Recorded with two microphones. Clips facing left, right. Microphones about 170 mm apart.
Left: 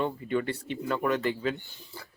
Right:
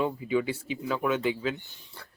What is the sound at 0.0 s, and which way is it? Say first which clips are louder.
Speech: right 2 dB; 5° right (ahead or behind).